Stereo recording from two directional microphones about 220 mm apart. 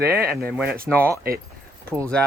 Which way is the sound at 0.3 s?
Centre (ahead or behind).